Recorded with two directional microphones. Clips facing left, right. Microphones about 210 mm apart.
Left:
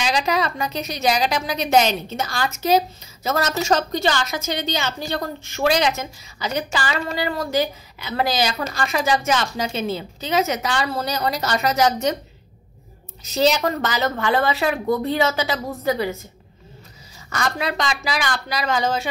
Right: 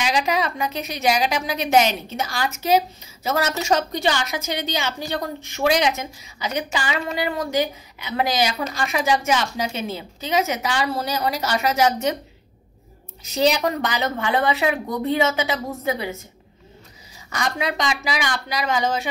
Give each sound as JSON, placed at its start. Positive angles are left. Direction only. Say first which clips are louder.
{"t": 0.0, "sound": "a woman's voice", "louder": "even", "side_deg": -10}
{"t": 13.2, "sound": "a woman's voice", "louder": "left 1 dB", "side_deg": -15}
{"t": 17.3, "sound": "a woman's voice", "louder": "left 1 dB", "side_deg": -15}